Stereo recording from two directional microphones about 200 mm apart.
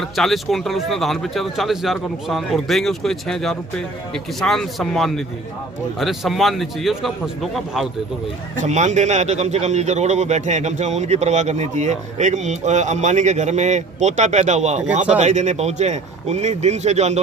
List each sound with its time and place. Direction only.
0.2 s speech: centre (ahead or behind)
8.6 s speech: 35° right (ahead or behind)